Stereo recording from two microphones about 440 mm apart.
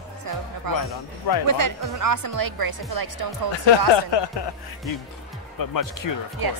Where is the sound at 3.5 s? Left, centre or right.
Left.